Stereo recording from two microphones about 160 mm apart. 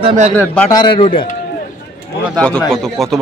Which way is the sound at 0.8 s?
30° left (ahead or behind).